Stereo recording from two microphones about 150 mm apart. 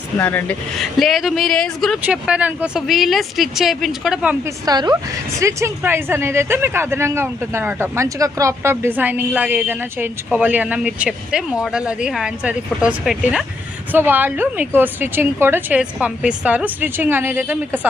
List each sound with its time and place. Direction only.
0.2 s speech: 10° left (ahead or behind)
0.8 s a woman's voice: centre (ahead or behind)
2.0 s a woman's voice: 10° right (ahead or behind)
4.4 s a woman's voice: 25° right (ahead or behind)